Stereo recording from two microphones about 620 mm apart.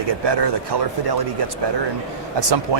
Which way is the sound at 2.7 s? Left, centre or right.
Right.